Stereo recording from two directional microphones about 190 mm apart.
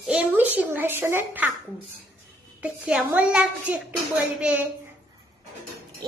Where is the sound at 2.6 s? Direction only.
5° right (ahead or behind).